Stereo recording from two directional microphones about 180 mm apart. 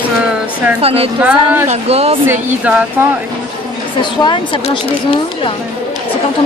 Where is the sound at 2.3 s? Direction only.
10° right (ahead or behind).